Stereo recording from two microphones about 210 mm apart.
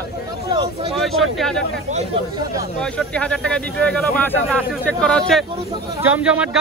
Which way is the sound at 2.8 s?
5° left (ahead or behind).